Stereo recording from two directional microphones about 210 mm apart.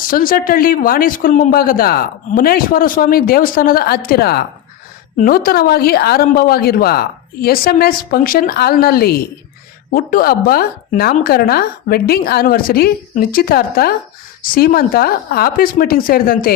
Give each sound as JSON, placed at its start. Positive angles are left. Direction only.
{"t": 0.0, "sound": "speech", "side_deg": 40}